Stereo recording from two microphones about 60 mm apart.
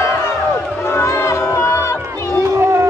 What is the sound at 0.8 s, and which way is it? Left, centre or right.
Music, left.